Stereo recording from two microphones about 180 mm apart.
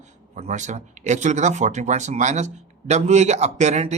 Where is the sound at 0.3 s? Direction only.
40° right (ahead or behind).